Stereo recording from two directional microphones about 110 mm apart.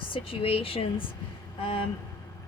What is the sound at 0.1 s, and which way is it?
Speech, 60° left (ahead or behind).